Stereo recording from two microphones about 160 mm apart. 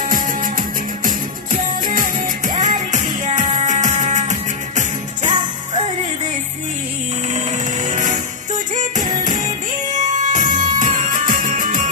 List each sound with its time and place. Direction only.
0.0 s music: 55° right (ahead or behind)
5.3 s music: 30° right (ahead or behind)
7.3 s music: 50° right (ahead or behind)
9.9 s music: 50° right (ahead or behind)